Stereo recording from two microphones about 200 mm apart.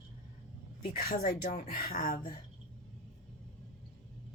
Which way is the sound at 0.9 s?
50° left (ahead or behind).